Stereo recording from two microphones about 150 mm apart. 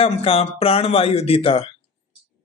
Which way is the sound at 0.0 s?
40° left (ahead or behind).